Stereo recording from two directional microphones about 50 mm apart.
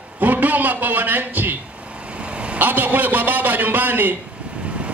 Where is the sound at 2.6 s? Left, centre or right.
Right.